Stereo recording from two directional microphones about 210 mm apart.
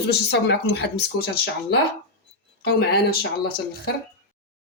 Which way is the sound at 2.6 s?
50° left (ahead or behind).